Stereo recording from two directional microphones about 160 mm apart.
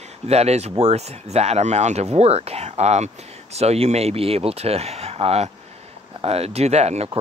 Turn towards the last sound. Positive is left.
turn(degrees=-45)  # may be behind; listen again after turning